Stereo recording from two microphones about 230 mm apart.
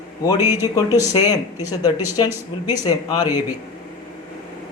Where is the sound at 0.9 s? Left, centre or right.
Centre.